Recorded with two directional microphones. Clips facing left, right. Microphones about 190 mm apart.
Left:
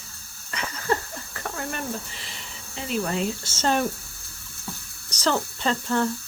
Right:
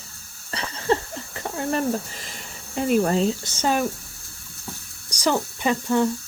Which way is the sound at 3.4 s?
15° right (ahead or behind).